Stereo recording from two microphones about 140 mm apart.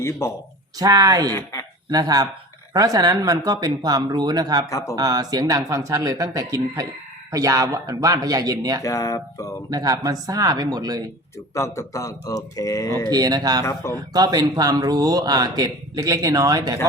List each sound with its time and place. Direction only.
0.0 s a man's voice: 20° left (ahead or behind)
0.8 s speech: 25° right (ahead or behind)
1.3 s a man's voice: 20° left (ahead or behind)
1.9 s speech: 30° right (ahead or behind)
4.6 s a man's voice: 20° left (ahead or behind)
4.9 s speech: 25° right (ahead or behind)
8.8 s a man's voice: 25° left (ahead or behind)
9.6 s speech: 25° right (ahead or behind)
11.5 s a man's voice: 20° left (ahead or behind)
13.1 s speech: 30° right (ahead or behind)